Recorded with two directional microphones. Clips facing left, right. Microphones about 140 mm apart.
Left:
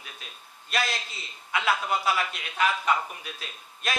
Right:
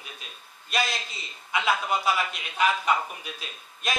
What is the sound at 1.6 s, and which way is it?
A woman's voice, 15° right (ahead or behind).